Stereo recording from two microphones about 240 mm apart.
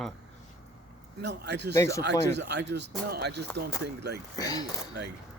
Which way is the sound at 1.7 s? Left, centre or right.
Centre.